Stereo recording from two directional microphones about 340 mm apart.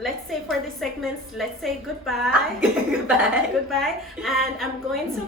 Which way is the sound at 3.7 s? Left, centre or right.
Centre.